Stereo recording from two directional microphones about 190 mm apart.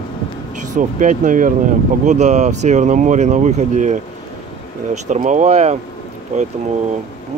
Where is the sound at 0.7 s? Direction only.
45° right (ahead or behind).